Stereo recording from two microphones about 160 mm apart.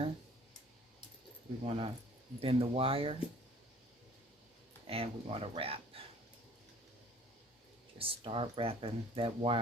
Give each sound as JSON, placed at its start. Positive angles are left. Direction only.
{"t": 1.6, "sound": "speech", "side_deg": -40}
{"t": 4.9, "sound": "speech", "side_deg": -35}
{"t": 7.9, "sound": "speech", "side_deg": -35}